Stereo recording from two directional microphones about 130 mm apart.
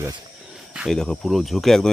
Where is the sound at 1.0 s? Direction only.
Centre (ahead or behind).